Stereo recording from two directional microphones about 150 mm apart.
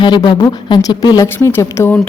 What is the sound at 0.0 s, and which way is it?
A woman's voice, 30° left (ahead or behind).